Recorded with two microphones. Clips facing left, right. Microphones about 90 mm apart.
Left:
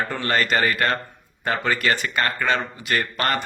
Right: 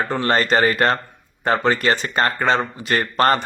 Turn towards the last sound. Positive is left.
turn(degrees=-35)  # may be behind; listen again after turning